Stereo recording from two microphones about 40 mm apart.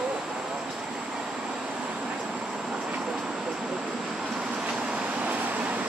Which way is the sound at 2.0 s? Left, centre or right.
Right.